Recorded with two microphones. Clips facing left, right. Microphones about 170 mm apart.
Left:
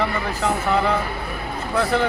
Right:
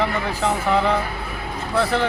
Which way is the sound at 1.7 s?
10° left (ahead or behind).